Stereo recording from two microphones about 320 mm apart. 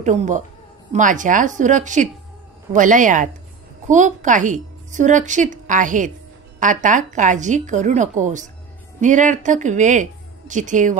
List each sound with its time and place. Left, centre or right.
0.0 s a woman's voice: right